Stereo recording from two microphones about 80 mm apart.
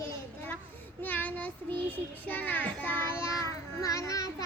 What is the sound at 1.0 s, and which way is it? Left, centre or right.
A child's voice, left.